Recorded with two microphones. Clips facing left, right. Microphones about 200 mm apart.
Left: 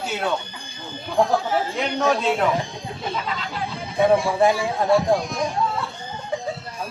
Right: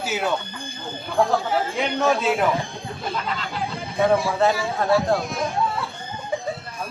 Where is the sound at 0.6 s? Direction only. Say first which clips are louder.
Right 3 dB; 55° right (ahead or behind).